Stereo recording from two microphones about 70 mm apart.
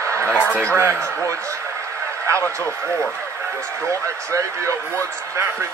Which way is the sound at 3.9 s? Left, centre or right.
Right.